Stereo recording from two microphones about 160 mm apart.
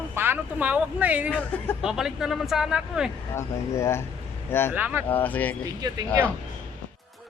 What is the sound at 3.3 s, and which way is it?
Speech, 15° left (ahead or behind).